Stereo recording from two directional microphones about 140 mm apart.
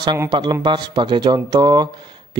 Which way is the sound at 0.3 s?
30° right (ahead or behind).